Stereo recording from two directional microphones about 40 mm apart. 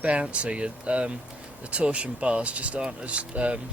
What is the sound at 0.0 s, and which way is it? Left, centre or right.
Speech, right.